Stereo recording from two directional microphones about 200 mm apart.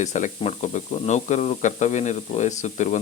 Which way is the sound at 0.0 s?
35° left (ahead or behind).